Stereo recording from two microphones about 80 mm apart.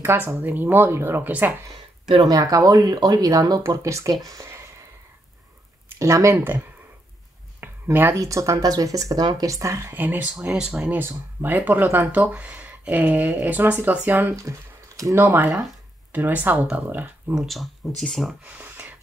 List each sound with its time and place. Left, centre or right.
0.0 s speech: right
2.2 s speech: right
3.6 s speech: right
5.9 s speech: right
7.6 s a sound: right
8.2 s speech: right
9.9 s speech: right
10.3 s speech: centre
10.8 s speech: right
17.4 s speech: centre
18.4 s a sound: centre